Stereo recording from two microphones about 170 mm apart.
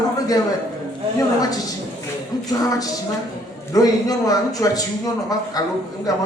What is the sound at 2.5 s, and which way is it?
Speech, 20° left (ahead or behind).